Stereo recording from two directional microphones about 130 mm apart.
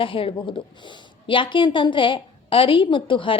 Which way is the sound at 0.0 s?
45° left (ahead or behind).